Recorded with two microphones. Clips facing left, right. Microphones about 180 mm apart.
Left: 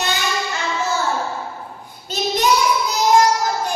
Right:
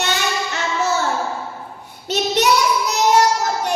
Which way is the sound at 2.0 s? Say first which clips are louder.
Right 1 dB; 75° right (ahead or behind).